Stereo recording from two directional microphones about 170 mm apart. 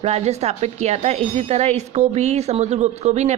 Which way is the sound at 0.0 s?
40° right (ahead or behind).